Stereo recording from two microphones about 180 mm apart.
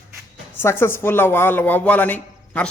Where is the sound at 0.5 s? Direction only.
15° left (ahead or behind).